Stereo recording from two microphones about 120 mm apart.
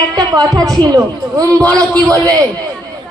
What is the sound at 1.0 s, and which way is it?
A woman's voice, 25° right (ahead or behind).